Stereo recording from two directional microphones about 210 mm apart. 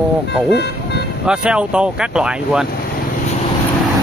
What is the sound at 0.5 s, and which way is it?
Music, 55° left (ahead or behind).